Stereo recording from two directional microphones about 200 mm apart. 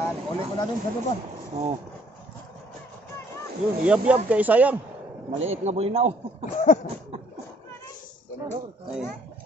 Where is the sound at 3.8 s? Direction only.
5° right (ahead or behind).